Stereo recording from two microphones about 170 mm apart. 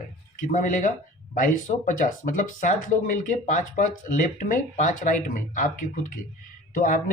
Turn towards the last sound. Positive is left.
turn(degrees=50)  # may be behind; listen again after turning